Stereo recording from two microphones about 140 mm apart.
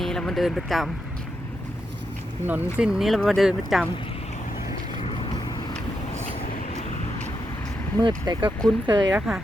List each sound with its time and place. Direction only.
0.0 s speech: 5° left (ahead or behind)
2.5 s speech: 10° right (ahead or behind)
5.0 s vehicle: 40° left (ahead or behind)
7.9 s speech: 35° right (ahead or behind)
9.1 s speech: 5° right (ahead or behind)